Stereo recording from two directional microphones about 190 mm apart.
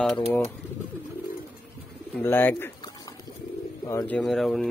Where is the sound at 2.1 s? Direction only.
10° left (ahead or behind).